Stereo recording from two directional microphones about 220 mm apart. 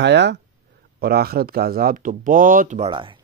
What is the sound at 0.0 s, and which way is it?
Speech, 50° right (ahead or behind).